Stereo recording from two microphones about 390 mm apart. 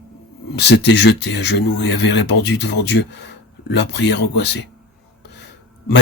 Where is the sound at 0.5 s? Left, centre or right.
Left.